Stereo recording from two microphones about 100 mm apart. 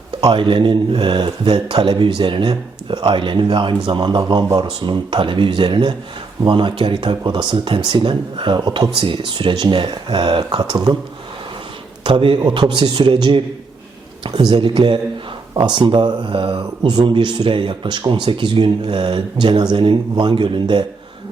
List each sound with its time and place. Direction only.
0.3 s speech: 55° right (ahead or behind)
12.0 s speech: 55° right (ahead or behind)